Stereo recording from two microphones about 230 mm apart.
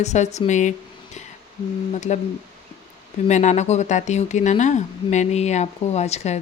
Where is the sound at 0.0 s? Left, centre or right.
Left.